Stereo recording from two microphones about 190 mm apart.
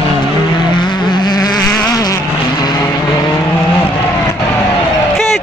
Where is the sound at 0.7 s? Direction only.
25° left (ahead or behind).